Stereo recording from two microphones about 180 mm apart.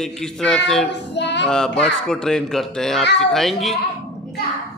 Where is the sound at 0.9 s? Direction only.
75° left (ahead or behind).